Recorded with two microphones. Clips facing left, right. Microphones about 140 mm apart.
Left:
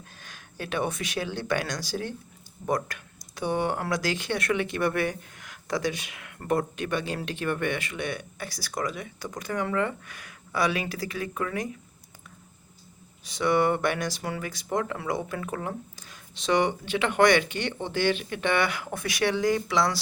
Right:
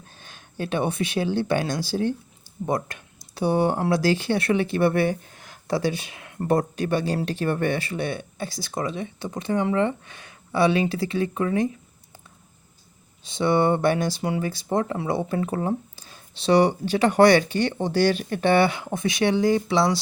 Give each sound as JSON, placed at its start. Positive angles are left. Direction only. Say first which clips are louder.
{"t": 0.0, "sound": "speech", "louder": "right 1 dB", "side_deg": -30}
{"t": 13.2, "sound": "speech", "louder": "right 3 dB", "side_deg": -25}